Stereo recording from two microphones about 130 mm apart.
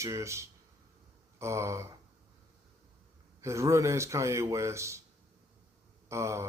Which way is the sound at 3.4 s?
25° right (ahead or behind).